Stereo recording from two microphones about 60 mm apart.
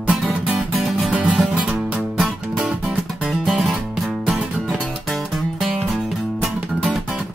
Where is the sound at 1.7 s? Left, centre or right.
Centre.